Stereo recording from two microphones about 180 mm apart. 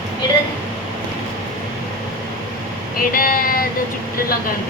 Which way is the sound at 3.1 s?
50° left (ahead or behind).